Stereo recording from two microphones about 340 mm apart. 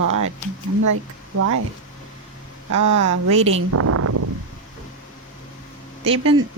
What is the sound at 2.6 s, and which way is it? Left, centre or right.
Speech, right.